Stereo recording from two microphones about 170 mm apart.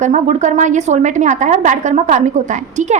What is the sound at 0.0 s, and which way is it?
A woman's voice, 45° right (ahead or behind).